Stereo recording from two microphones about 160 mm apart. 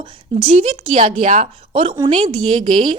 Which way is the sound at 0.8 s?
50° right (ahead or behind).